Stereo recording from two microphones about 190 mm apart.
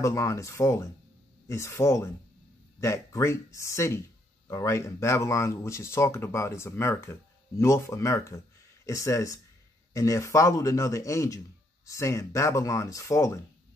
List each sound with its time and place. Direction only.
0.0 s speech: 15° left (ahead or behind)